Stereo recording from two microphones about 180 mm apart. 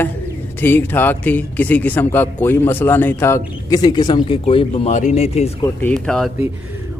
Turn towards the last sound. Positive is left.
turn(degrees=5)  # may be behind; listen again after turning